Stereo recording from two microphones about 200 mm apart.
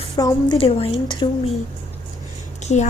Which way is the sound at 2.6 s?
35° left (ahead or behind).